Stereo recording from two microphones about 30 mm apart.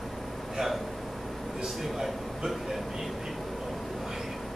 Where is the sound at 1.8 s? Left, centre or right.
Centre.